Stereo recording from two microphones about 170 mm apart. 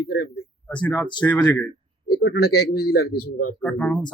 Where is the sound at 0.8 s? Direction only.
10° left (ahead or behind).